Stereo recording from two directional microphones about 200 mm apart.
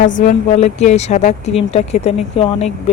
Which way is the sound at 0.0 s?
40° left (ahead or behind).